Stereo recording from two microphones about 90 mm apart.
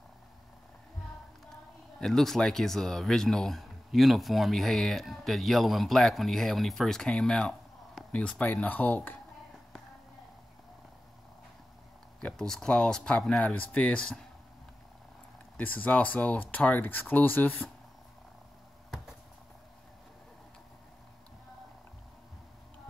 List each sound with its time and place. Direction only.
2.0 s speech: 5° left (ahead or behind); by 9.2 s 20° left (ahead or behind)
12.2 s speech: 10° left (ahead or behind)
15.5 s speech: 15° left (ahead or behind)